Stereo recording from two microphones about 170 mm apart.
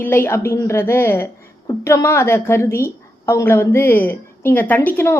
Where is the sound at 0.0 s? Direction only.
15° left (ahead or behind).